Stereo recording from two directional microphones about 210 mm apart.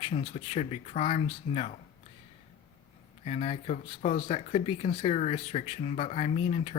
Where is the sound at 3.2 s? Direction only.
30° left (ahead or behind).